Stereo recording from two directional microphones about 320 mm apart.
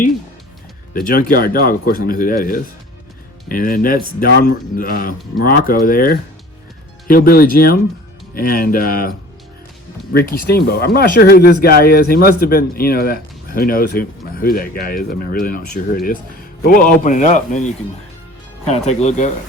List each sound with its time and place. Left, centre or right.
0.9 s speech: left